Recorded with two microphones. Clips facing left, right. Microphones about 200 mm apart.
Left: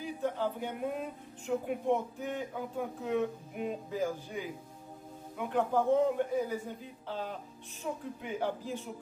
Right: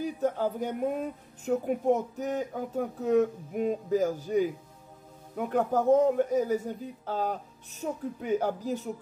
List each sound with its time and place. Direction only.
0.0 s speech: 40° right (ahead or behind)